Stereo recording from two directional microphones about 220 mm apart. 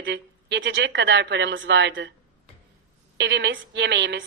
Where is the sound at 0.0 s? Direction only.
55° right (ahead or behind).